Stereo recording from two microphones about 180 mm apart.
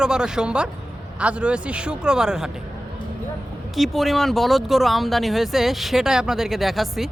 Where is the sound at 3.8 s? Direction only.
Centre (ahead or behind).